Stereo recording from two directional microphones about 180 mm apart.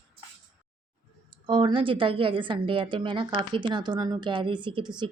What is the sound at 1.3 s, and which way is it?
A woman's voice, 30° right (ahead or behind).